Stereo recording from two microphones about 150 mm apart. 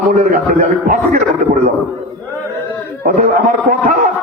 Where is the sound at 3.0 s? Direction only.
55° right (ahead or behind).